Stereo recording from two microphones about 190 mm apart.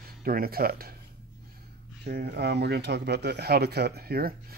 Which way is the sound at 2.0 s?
55° right (ahead or behind).